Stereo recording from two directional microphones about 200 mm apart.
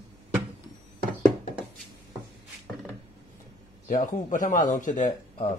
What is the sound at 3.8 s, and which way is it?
Speech, 40° left (ahead or behind).